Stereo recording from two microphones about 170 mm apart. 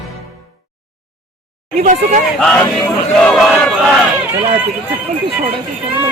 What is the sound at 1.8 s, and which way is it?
Speech, 45° right (ahead or behind).